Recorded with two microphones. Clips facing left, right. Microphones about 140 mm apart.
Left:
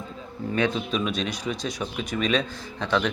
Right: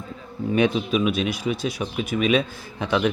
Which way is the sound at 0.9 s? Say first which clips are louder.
Right 5 dB; 5° right (ahead or behind).